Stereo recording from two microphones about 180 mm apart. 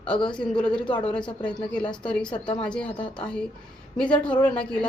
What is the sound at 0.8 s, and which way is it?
Speech, 25° left (ahead or behind).